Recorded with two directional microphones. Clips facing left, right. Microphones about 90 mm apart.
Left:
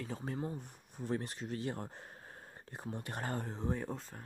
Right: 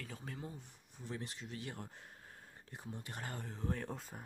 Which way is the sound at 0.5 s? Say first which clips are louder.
Left 8 dB; 55° left (ahead or behind).